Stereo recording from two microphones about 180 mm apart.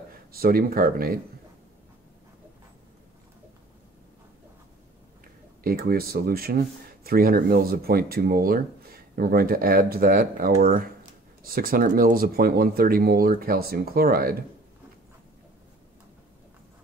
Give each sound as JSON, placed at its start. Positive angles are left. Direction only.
{"t": 0.3, "sound": "speech", "side_deg": -55}
{"t": 5.6, "sound": "speech", "side_deg": -55}